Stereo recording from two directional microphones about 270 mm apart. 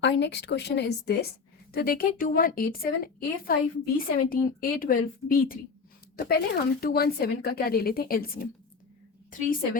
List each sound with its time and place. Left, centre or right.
0.0 s a woman's voice: left